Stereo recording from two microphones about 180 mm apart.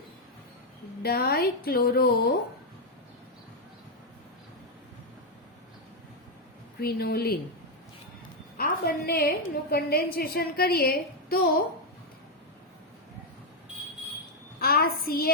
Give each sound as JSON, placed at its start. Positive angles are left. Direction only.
{"t": 1.0, "sound": "a woman's voice", "side_deg": 60}
{"t": 6.7, "sound": "a woman's voice", "side_deg": 60}
{"t": 8.5, "sound": "a woman's voice", "side_deg": 55}
{"t": 14.6, "sound": "a child's voice", "side_deg": 60}